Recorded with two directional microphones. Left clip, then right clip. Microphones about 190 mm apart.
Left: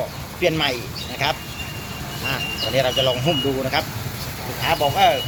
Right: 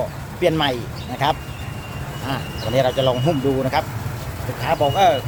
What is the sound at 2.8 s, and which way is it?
Speech, 20° right (ahead or behind).